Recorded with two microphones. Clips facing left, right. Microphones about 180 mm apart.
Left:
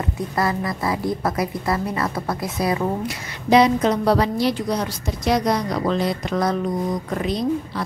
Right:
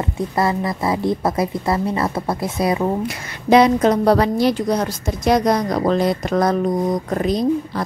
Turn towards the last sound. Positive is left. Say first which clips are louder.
# right 4 dB
turn(degrees=-45)  # may be behind; listen again after turning